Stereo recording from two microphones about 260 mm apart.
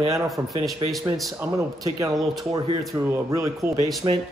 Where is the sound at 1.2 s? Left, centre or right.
Centre.